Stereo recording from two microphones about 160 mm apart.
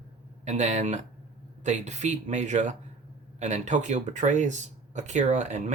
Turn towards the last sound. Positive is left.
turn(degrees=-50)  # may be behind; listen again after turning